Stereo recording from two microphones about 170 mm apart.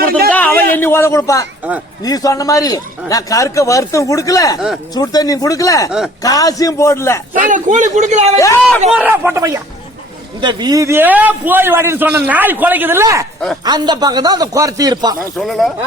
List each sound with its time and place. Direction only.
0.3 s a man's voice: 10° left (ahead or behind)
7.3 s a man's voice: 45° right (ahead or behind)
8.4 s a man's voice: 20° left (ahead or behind)
8.9 s a man's voice: 10° right (ahead or behind)
15.4 s speech: centre (ahead or behind)